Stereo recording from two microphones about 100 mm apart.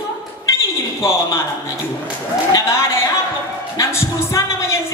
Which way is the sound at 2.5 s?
30° left (ahead or behind).